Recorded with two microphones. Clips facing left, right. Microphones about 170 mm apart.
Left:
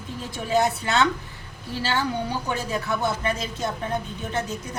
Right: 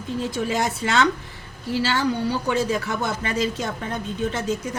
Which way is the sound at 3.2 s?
90° right.